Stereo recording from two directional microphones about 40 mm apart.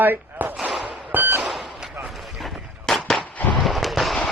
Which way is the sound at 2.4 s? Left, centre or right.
Centre.